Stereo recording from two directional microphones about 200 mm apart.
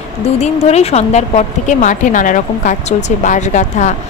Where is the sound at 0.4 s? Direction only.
35° left (ahead or behind).